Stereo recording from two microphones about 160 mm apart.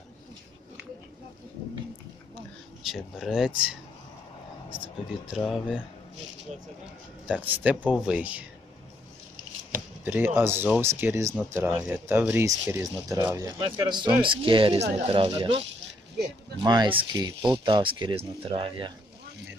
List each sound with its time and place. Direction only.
2.8 s speech: centre (ahead or behind)
5.4 s speech: centre (ahead or behind)
7.3 s speech: 10° right (ahead or behind)
10.0 s speech: 10° right (ahead or behind); by 18.9 s 30° right (ahead or behind)